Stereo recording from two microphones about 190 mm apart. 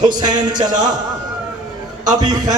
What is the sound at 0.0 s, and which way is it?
Speech, 20° right (ahead or behind).